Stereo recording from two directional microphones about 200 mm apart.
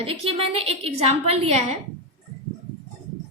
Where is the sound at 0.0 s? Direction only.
30° right (ahead or behind).